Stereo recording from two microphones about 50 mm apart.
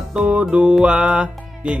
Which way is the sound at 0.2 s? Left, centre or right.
Right.